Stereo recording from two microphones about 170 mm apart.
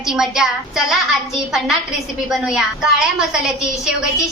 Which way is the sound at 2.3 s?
5° right (ahead or behind).